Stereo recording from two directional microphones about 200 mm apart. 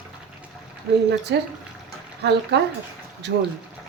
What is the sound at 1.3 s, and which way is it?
Speech, 60° right (ahead or behind).